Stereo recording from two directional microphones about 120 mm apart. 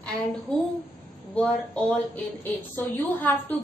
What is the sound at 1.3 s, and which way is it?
A woman's voice, 10° left (ahead or behind).